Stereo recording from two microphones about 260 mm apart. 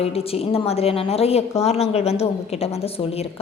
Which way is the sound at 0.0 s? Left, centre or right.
Left.